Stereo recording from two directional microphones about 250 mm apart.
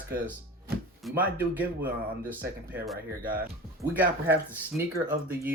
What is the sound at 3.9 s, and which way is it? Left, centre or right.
Speech, centre.